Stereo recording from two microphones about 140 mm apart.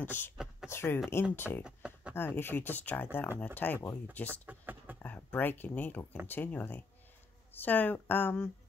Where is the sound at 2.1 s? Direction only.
15° left (ahead or behind).